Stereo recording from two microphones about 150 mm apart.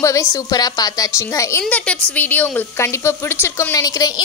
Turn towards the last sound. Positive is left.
turn(degrees=25)  # may be behind; listen again after turning